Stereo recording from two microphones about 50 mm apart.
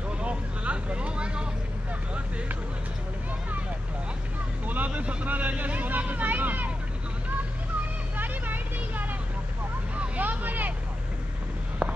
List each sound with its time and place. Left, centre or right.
0.2 s vehicle: right
4.6 s vehicle: right
8.2 s vehicle: right
11.8 s a sound: centre